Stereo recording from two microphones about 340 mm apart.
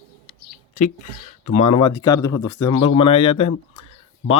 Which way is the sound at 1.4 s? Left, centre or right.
Centre.